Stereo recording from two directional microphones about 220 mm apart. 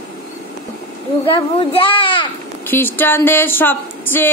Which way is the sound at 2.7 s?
10° left (ahead or behind).